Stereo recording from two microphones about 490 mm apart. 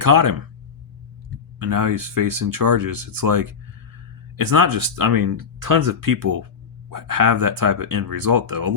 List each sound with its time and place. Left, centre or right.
0.0 s speech: right
1.5 s speech: right